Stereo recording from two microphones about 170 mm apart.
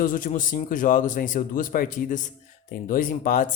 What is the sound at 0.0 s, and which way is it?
Speech, 55° left (ahead or behind).